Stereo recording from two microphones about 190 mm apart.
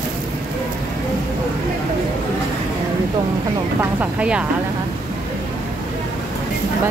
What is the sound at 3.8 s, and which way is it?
Speech, 10° right (ahead or behind).